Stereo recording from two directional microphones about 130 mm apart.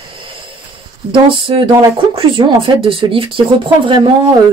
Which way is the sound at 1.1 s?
45° right (ahead or behind).